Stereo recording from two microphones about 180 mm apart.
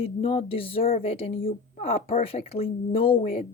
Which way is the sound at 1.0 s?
35° left (ahead or behind).